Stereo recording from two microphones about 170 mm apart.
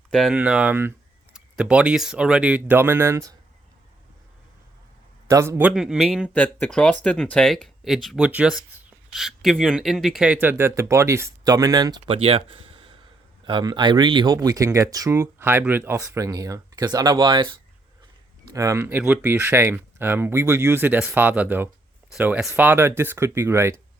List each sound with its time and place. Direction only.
0.1 s speech: centre (ahead or behind); by 3.3 s 15° right (ahead or behind)
5.3 s speech: 15° right (ahead or behind)
6.3 s speech: 10° left (ahead or behind); by 17.5 s 25° right (ahead or behind)
18.5 s speech: 20° right (ahead or behind)